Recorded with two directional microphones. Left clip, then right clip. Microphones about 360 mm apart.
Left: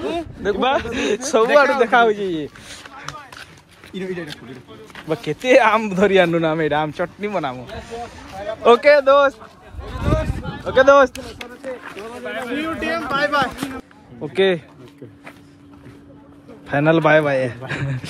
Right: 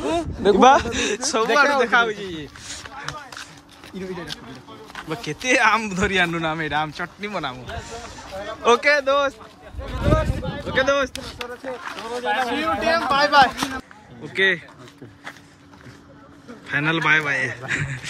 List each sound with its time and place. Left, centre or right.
0.0 s a sound: right
0.7 s a man's voice: centre
4.9 s a man's voice: centre
8.7 s a man's voice: centre
9.8 s a sound: centre
12.0 s speech: centre
14.3 s a man's voice: centre
16.6 s a man's voice: centre